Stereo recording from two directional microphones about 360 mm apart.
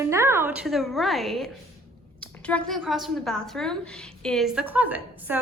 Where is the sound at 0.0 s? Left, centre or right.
Centre.